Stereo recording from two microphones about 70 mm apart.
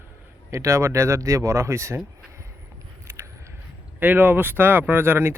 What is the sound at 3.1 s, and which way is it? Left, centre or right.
Vehicle, right.